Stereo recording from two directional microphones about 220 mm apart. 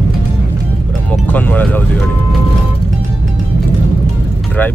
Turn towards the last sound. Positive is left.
turn(degrees=10)  # may be behind; listen again after turning